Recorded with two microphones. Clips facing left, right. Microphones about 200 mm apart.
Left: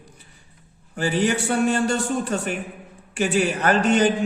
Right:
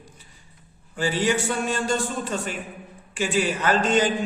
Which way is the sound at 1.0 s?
65° left (ahead or behind).